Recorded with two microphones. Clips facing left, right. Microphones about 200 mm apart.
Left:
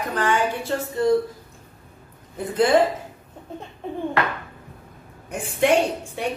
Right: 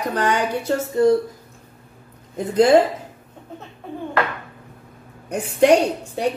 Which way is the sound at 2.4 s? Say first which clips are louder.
Right 4 dB; 40° right (ahead or behind).